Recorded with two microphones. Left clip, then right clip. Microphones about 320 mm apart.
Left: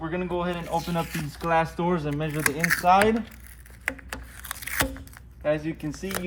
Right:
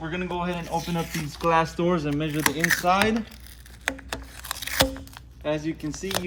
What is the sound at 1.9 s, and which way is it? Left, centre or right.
A man's voice, centre.